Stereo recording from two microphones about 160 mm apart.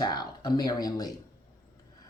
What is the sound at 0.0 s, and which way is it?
Speech, 25° left (ahead or behind).